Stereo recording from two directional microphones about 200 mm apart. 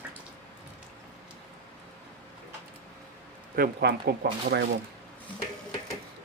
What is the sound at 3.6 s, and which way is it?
Speech, 50° right (ahead or behind).